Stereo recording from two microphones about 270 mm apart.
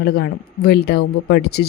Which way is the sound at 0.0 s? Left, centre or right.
Left.